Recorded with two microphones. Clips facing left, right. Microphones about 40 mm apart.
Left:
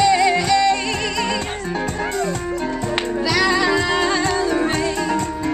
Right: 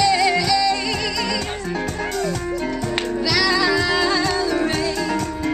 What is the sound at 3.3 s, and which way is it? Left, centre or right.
Music, left.